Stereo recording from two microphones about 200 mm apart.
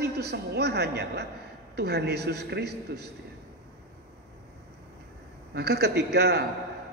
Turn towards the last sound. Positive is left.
turn(degrees=-55)  # may be behind; listen again after turning